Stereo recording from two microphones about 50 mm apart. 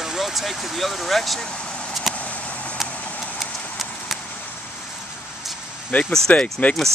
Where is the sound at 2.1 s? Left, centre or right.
Left.